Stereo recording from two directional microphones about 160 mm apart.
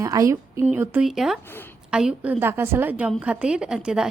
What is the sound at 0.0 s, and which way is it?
A woman's voice, 20° right (ahead or behind).